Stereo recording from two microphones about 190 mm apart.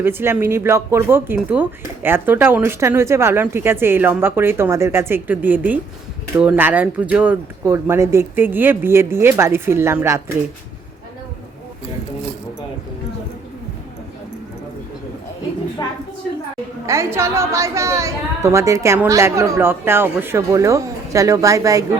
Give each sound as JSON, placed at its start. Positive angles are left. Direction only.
{"t": 0.0, "sound": "a woman's voice", "side_deg": -10}
{"t": 15.8, "sound": "a sound", "side_deg": 20}
{"t": 16.8, "sound": "a woman's voice", "side_deg": -15}